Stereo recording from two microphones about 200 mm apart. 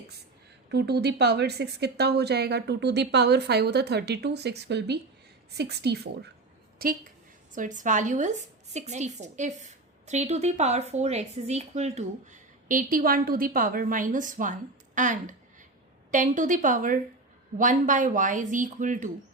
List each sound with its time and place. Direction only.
0.7 s a woman's voice: 55° right (ahead or behind); by 19.1 s 40° right (ahead or behind)